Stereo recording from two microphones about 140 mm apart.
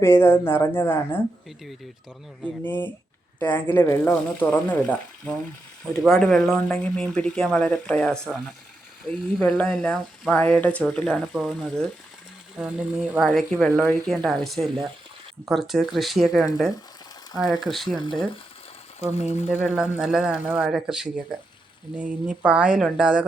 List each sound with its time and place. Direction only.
0.0 s speech: 15° left (ahead or behind)
2.6 s speech: 15° left (ahead or behind)
5.8 s speech: centre (ahead or behind)
9.4 s speech: 10° left (ahead or behind)
10.9 s speech: centre (ahead or behind)
18.9 s speech: 50° left (ahead or behind)
19.6 s speech: 10° right (ahead or behind)